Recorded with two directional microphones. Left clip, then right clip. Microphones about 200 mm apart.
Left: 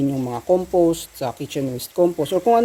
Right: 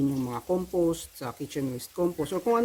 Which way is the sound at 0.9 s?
15° right (ahead or behind).